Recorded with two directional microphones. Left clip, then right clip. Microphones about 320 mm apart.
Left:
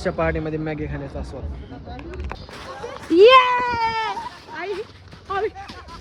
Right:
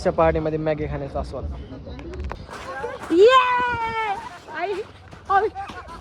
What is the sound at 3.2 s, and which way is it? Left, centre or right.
Speech, left.